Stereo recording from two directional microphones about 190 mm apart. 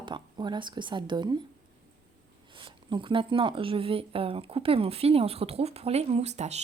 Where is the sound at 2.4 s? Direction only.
25° right (ahead or behind).